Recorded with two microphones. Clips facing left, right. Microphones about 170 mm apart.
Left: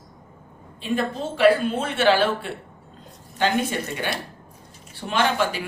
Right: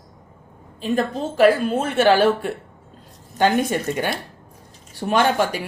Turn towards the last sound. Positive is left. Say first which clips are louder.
# right 4 dB
turn(degrees=-45)  # may be behind; listen again after turning